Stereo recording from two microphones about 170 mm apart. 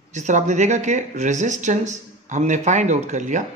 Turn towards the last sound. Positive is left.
turn(degrees=-45)  # may be behind; listen again after turning